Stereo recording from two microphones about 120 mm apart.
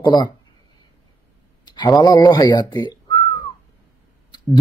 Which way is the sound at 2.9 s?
35° left (ahead or behind).